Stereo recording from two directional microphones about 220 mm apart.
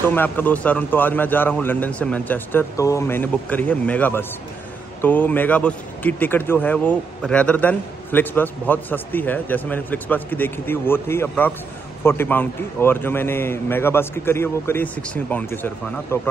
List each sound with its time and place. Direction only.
0.1 s speech: 10° left (ahead or behind)